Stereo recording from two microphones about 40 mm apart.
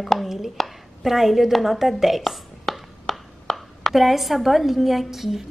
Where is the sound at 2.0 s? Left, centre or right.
Centre.